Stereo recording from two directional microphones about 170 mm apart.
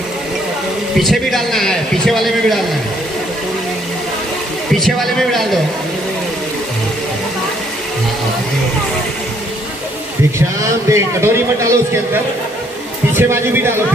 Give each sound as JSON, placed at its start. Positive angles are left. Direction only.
{"t": 0.9, "sound": "a man's voice", "side_deg": 0}
{"t": 4.7, "sound": "a man's voice", "side_deg": 0}
{"t": 10.9, "sound": "a man's voice", "side_deg": -15}